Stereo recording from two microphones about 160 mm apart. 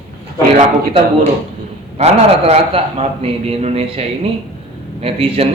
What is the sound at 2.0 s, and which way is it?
A man's voice, 45° right (ahead or behind).